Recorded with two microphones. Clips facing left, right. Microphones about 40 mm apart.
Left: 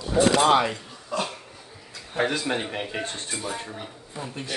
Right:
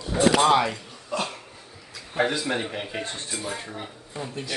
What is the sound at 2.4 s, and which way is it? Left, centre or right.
Speech, centre.